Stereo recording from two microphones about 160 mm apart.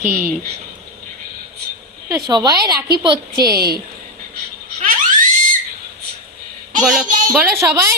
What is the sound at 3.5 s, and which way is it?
Speech, 75° right (ahead or behind).